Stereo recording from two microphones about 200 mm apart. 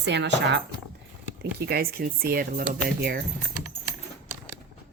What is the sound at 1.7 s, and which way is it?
Speech, 50° right (ahead or behind).